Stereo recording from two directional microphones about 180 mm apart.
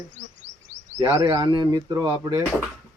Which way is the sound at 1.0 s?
20° right (ahead or behind).